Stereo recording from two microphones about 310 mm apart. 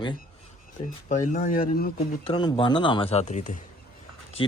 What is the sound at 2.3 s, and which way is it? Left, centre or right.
Speech, centre.